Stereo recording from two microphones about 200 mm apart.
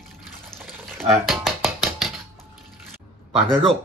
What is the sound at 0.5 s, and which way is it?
Water, 5° left (ahead or behind).